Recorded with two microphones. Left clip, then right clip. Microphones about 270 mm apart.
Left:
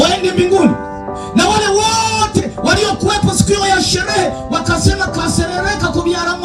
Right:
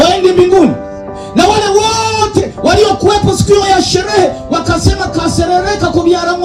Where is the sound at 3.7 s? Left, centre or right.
Left.